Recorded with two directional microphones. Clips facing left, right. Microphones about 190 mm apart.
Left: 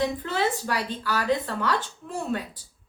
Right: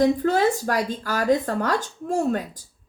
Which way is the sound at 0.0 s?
45° right (ahead or behind).